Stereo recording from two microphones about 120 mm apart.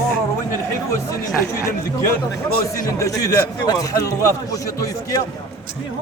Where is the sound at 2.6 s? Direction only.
25° left (ahead or behind).